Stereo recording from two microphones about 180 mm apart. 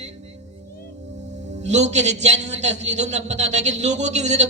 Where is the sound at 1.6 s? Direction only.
40° right (ahead or behind).